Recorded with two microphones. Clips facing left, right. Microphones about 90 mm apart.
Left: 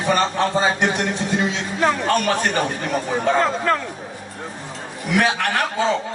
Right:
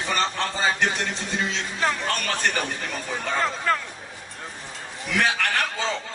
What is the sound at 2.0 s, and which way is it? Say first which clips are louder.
Speech: left 7 dB; 20° left (ahead or behind).